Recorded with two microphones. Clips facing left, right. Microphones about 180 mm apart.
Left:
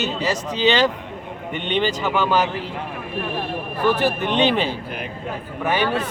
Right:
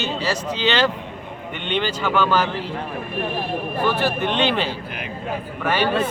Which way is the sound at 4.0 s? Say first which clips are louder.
Left 1 dB; 15° left (ahead or behind).